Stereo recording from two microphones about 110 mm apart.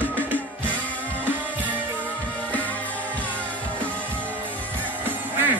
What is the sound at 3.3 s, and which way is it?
Music, 15° right (ahead or behind).